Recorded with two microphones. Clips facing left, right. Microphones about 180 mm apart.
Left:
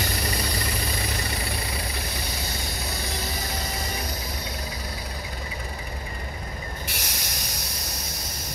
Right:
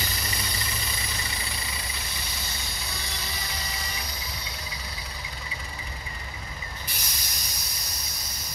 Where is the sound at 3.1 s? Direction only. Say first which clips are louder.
Left 6 dB; 45° left (ahead or behind).